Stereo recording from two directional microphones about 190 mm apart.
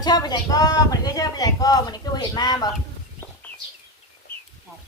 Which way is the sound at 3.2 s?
10° left (ahead or behind).